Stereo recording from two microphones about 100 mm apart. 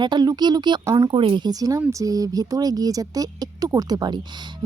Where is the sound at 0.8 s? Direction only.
30° right (ahead or behind).